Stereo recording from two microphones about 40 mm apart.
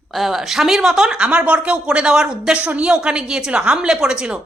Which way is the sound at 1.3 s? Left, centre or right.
Right.